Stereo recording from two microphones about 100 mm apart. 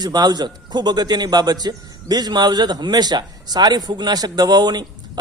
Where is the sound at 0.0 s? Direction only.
45° right (ahead or behind).